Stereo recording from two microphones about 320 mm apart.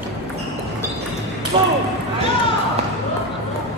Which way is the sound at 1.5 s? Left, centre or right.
Centre.